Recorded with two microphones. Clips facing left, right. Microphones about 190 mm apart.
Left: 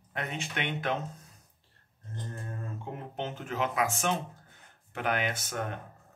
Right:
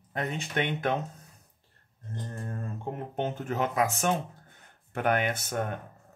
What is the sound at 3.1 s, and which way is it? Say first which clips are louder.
Speech: right 4 dB; 45° right (ahead or behind).